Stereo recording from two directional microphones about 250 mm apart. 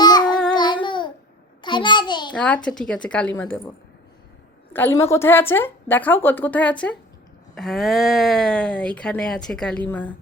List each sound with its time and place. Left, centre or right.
0.0 s child singing: centre
0.5 s a sound: centre
2.3 s speech: centre
4.7 s a woman's voice: centre